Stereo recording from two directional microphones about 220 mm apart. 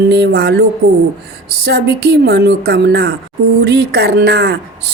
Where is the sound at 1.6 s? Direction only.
50° right (ahead or behind).